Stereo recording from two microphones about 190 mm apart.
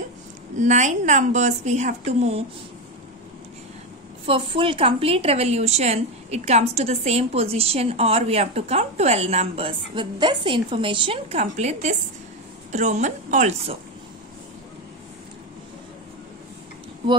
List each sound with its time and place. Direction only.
0.6 s a woman's voice: 40° right (ahead or behind)
4.3 s a woman's voice: 30° right (ahead or behind)